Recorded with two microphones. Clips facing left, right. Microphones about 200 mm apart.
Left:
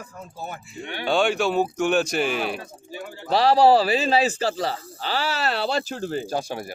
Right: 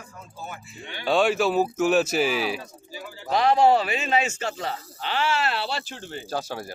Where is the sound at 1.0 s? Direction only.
Centre (ahead or behind).